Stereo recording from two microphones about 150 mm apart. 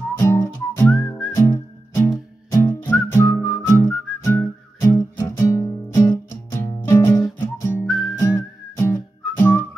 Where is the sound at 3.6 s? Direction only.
15° left (ahead or behind).